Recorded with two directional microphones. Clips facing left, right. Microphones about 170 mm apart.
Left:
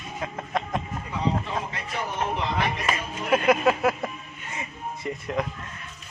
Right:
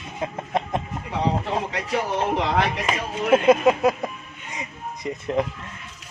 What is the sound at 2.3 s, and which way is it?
Speech, 90° right.